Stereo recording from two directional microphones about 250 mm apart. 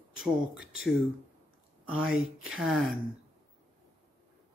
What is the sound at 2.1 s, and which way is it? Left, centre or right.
Speech, right.